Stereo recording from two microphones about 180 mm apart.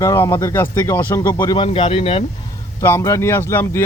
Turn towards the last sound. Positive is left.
turn(degrees=10)  # may be behind; listen again after turning